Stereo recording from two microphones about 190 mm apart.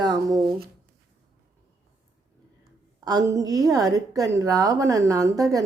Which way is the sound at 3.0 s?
20° right (ahead or behind).